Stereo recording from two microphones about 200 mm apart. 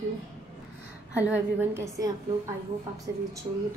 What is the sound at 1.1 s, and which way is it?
Speech, 10° right (ahead or behind).